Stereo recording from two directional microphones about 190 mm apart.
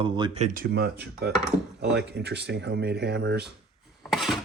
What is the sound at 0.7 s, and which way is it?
Speech, 60° right (ahead or behind).